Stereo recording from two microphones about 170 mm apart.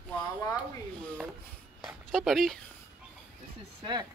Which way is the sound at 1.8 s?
Centre (ahead or behind).